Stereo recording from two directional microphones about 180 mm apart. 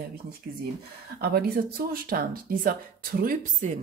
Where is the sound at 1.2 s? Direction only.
60° right (ahead or behind).